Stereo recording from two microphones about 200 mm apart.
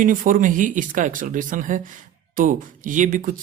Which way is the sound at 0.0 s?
40° right (ahead or behind).